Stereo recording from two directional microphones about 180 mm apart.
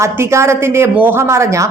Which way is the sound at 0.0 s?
15° right (ahead or behind).